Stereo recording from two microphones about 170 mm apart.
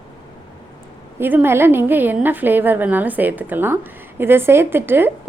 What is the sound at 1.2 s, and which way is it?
A woman's voice, 10° right (ahead or behind).